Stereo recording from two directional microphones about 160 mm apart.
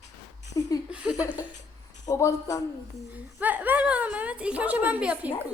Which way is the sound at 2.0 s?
20° left (ahead or behind).